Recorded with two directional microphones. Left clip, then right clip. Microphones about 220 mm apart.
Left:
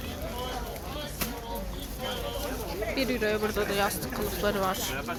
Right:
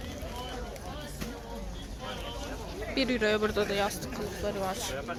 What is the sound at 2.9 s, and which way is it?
Speech, 25° right (ahead or behind).